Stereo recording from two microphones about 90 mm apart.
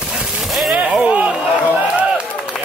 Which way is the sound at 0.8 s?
15° right (ahead or behind).